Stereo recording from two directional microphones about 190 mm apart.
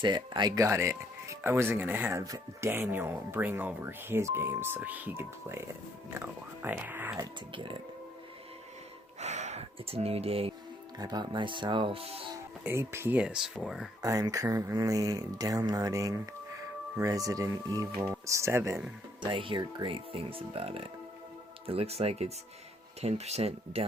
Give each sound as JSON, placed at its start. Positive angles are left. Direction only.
{"t": 0.0, "sound": "speech", "side_deg": -25}
{"t": 7.5, "sound": "speech", "side_deg": -25}
{"t": 9.2, "sound": "speech", "side_deg": -35}
{"t": 12.6, "sound": "speech", "side_deg": -15}
{"t": 14.0, "sound": "speech", "side_deg": -20}
{"t": 19.2, "sound": "speech", "side_deg": -25}